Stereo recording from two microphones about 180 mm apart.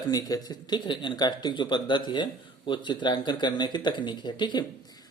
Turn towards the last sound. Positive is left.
turn(degrees=25)  # may be behind; listen again after turning